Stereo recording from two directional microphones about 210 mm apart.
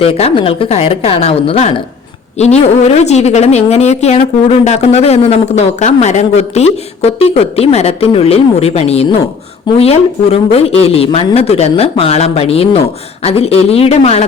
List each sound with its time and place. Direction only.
0.0 s a woman's voice: 30° left (ahead or behind)